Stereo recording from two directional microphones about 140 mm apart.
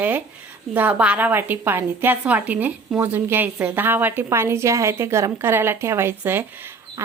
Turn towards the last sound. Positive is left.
turn(degrees=-15)  # may be behind; listen again after turning